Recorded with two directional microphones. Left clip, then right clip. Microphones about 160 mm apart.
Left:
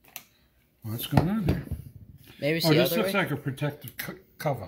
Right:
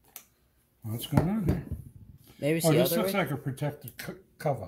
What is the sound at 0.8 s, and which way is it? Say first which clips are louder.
Speech: left 3 dB; 10° right (ahead or behind).